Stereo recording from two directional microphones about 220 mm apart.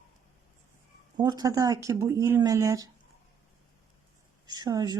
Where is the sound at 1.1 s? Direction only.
20° right (ahead or behind).